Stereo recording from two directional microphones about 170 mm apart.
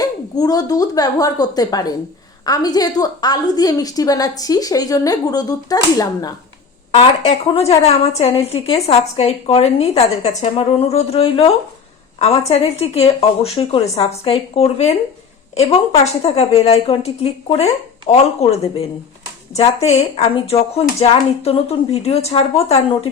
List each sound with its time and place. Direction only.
0.0 s a woman's voice: 20° left (ahead or behind)
6.9 s speech: 35° left (ahead or behind)
16.2 s speech: 35° left (ahead or behind)